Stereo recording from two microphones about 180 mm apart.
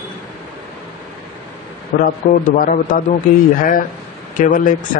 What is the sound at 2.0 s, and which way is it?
A man's voice, 50° left (ahead or behind).